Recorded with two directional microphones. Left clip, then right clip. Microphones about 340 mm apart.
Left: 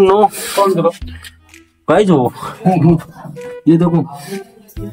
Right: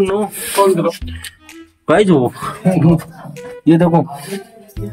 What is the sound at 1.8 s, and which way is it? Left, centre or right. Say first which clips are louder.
Speech: even; centre.